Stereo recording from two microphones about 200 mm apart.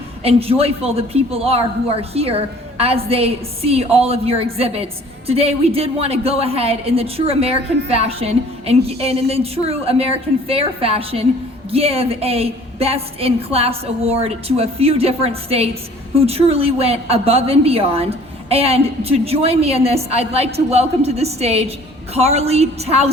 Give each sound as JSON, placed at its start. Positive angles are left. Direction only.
{"t": 0.2, "sound": "a woman's voice", "side_deg": -30}